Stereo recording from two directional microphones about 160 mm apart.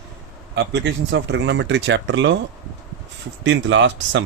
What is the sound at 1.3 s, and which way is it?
Speech, 90° right.